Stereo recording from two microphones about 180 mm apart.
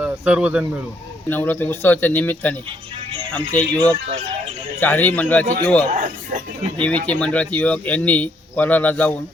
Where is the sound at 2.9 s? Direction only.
30° right (ahead or behind).